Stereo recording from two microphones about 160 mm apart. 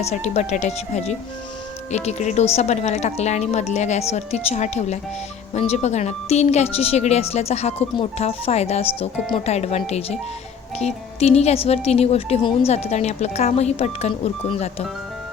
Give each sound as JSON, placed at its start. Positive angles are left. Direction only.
{"t": 0.0, "sound": "a woman's voice", "side_deg": 45}